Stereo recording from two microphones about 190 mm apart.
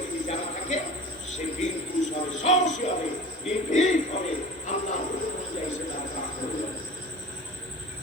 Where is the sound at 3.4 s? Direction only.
40° left (ahead or behind).